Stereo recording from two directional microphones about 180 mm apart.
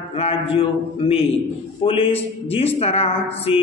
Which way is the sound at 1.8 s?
30° left (ahead or behind).